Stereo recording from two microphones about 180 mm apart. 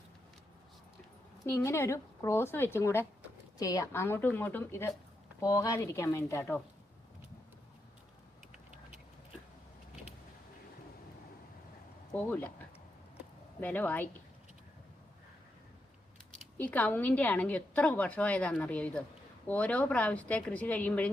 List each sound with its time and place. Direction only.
1.5 s a woman's voice: 15° left (ahead or behind)
12.1 s a woman's voice: 10° left (ahead or behind)
13.6 s a woman's voice: 10° left (ahead or behind)
16.6 s a woman's voice: 10° left (ahead or behind)